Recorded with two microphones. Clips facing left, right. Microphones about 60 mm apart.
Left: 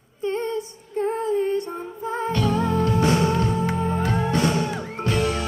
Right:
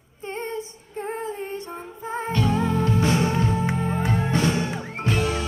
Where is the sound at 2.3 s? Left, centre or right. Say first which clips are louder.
Even; centre.